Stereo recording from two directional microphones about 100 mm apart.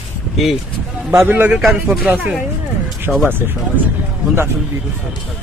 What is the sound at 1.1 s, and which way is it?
Speech, 20° right (ahead or behind).